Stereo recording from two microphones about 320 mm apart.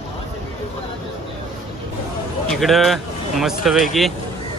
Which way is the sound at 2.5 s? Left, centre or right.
Centre.